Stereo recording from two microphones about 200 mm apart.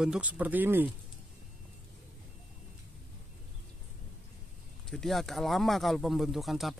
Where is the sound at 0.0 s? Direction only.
5° right (ahead or behind).